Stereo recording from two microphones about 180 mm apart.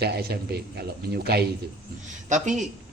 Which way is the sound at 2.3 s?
40° right (ahead or behind).